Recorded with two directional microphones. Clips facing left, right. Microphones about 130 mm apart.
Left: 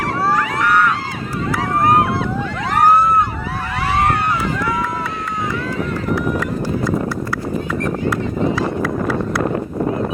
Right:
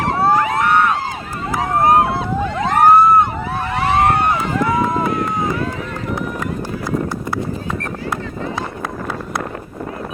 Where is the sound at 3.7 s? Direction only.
25° right (ahead or behind).